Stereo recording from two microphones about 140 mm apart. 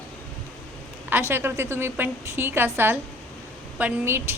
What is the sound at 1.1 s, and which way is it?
A woman's voice, 15° right (ahead or behind).